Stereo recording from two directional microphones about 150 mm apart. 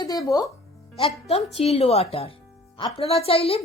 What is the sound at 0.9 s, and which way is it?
A woman's voice, 40° left (ahead or behind).